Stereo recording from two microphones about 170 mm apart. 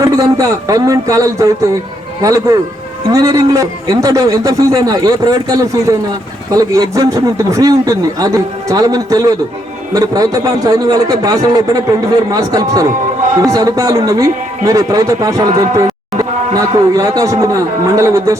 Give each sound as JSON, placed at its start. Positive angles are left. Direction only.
{"t": 0.0, "sound": "a man's voice", "side_deg": -20}